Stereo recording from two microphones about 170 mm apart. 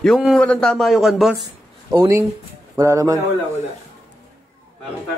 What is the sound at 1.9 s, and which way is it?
A man's voice, 20° right (ahead or behind).